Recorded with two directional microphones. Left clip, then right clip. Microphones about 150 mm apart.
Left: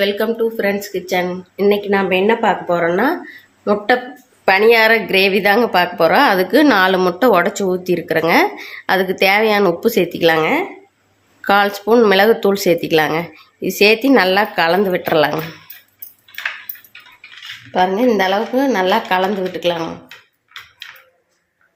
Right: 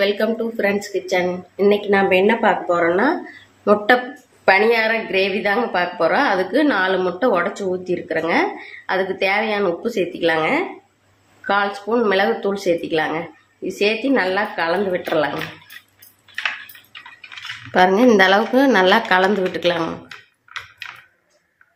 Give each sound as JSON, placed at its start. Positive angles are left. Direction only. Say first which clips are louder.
{"t": 0.0, "sound": "speech", "louder": "left 2 dB", "side_deg": 20}
{"t": 3.6, "sound": "speech", "louder": "even", "side_deg": 5}
{"t": 4.4, "sound": "a woman's voice", "louder": "left 2 dB", "side_deg": 25}
{"t": 4.7, "sound": "a woman's voice", "louder": "left 6 dB", "side_deg": 55}
{"t": 11.4, "sound": "a woman's voice", "louder": "left 6 dB", "side_deg": 60}
{"t": 17.7, "sound": "a woman's voice", "louder": "right 1 dB", "side_deg": -10}